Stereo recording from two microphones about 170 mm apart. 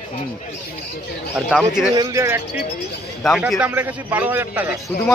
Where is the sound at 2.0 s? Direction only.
20° right (ahead or behind).